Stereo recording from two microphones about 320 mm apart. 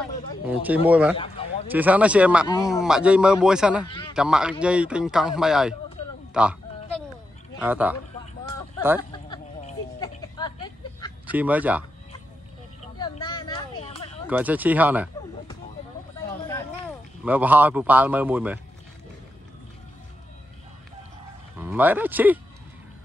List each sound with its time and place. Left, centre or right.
0.5 s speech: centre
1.1 s a sound: centre
1.7 s speech: centre
3.8 s speech: centre
4.1 s speech: centre
7.6 s speech: centre
9.9 s a sound: centre
11.3 s speech: centre
13.0 s a sound: centre
14.3 s speech: centre
17.2 s speech: centre
21.5 s speech: centre